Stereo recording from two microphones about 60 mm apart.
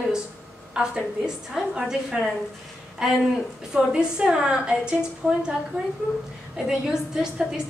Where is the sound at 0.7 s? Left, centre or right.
Centre.